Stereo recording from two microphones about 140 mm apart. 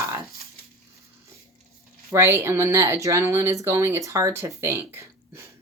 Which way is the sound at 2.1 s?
20° right (ahead or behind).